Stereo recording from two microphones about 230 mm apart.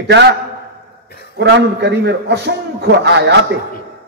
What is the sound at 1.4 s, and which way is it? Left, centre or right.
A man's voice, right.